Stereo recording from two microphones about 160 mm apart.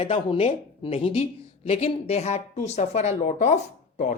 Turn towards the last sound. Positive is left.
turn(degrees=50)  # may be behind; listen again after turning